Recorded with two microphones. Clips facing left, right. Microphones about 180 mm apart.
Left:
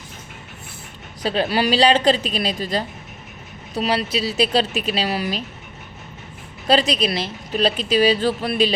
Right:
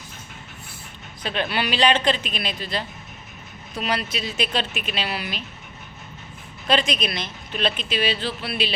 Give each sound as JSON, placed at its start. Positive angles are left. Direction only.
{"t": 1.2, "sound": "speech", "side_deg": 35}
{"t": 3.8, "sound": "speech", "side_deg": 30}
{"t": 6.7, "sound": "speech", "side_deg": 35}